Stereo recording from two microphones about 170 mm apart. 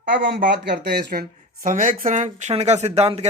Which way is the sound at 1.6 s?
50° right (ahead or behind).